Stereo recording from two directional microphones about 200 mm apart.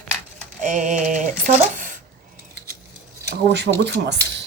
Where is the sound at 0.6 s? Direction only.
40° right (ahead or behind).